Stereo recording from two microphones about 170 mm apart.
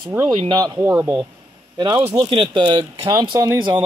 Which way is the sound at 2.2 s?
30° right (ahead or behind).